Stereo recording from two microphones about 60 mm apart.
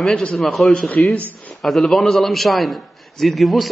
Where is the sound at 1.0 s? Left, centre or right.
Centre.